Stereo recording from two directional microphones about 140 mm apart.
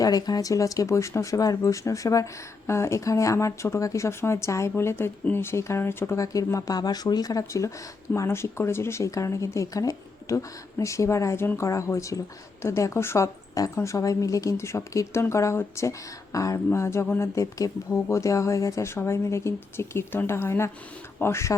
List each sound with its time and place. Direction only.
0.0 s speech: 25° left (ahead or behind)